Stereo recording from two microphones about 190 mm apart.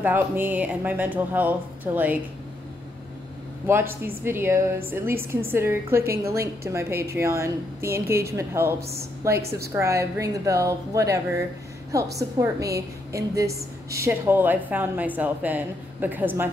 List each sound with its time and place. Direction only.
0.0 s a woman's voice: 10° right (ahead or behind)
3.6 s a woman's voice: 10° right (ahead or behind)